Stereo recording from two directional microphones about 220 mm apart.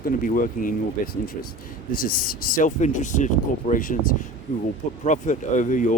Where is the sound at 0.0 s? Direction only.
40° left (ahead or behind).